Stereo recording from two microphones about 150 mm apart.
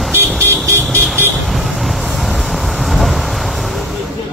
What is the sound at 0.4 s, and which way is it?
Vehicle, 15° right (ahead or behind).